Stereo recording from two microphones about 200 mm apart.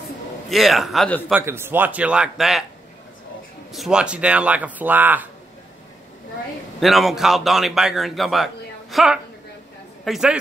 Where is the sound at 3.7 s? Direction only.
Centre (ahead or behind).